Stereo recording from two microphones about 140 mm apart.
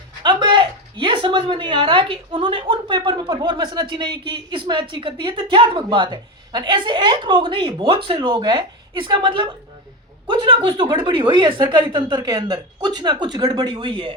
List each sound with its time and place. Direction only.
0.2 s speech: 30° right (ahead or behind)